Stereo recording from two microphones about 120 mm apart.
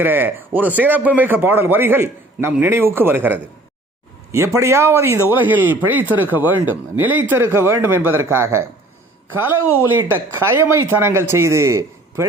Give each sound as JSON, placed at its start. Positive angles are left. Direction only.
{"t": 0.0, "sound": "a man's voice", "side_deg": -15}